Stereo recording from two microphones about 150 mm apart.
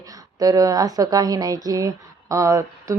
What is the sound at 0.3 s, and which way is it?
Speech, 25° right (ahead or behind).